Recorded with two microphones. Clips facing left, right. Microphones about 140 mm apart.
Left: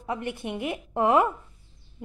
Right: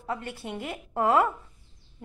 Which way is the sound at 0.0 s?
15° left (ahead or behind).